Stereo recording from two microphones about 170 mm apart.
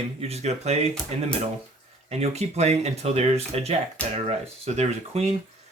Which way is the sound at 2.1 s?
40° right (ahead or behind).